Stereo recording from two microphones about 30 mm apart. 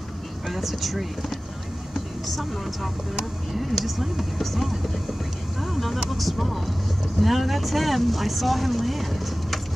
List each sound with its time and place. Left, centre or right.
0.5 s speech: centre